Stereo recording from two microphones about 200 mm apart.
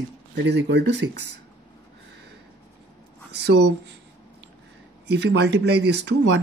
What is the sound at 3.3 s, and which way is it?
Speech, 60° right (ahead or behind).